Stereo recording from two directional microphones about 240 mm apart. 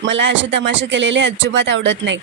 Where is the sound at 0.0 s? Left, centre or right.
Right.